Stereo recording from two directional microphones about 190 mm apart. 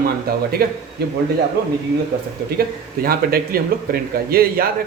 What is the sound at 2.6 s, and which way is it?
Speech, 50° right (ahead or behind).